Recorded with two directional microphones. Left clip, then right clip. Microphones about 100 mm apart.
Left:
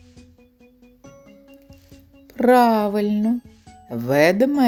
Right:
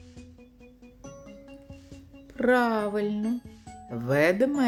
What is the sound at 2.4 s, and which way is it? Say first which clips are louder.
Speech: left 8 dB; 40° left (ahead or behind).